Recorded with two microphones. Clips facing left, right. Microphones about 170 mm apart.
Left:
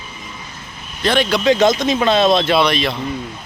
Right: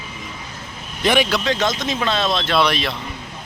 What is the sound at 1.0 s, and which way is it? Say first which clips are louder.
Speech: even; 15° right (ahead or behind).